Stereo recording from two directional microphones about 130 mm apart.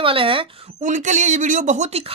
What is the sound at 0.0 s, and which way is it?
Speech, 45° right (ahead or behind).